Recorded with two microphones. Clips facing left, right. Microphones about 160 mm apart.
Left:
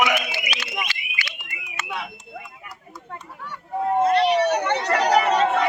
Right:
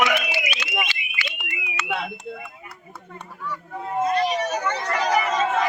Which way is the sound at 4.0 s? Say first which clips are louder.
Left 3 dB; 70° left (ahead or behind).